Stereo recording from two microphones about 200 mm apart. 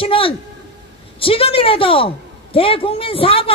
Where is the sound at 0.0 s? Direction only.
25° left (ahead or behind).